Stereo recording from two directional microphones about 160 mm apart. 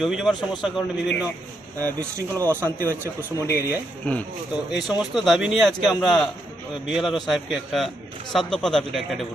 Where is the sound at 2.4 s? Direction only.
15° right (ahead or behind).